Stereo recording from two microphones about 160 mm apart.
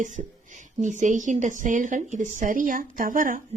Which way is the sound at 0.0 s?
50° right (ahead or behind).